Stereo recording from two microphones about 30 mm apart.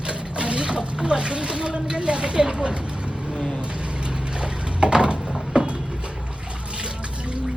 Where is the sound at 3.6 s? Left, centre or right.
Right.